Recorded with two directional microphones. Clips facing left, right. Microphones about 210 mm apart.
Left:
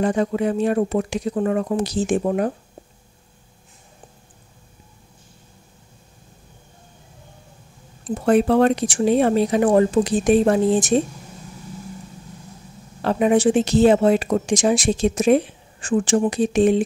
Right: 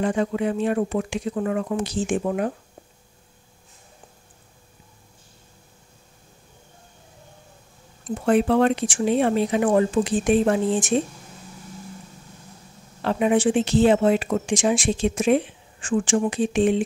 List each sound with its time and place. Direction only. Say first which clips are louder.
0.0 s speech: left 3 dB; 40° left (ahead or behind)
8.0 s speech: left 3 dB; 40° left (ahead or behind)
13.0 s speech: left 3 dB; 40° left (ahead or behind)